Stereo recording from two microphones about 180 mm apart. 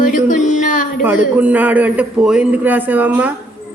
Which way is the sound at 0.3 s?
45° left (ahead or behind).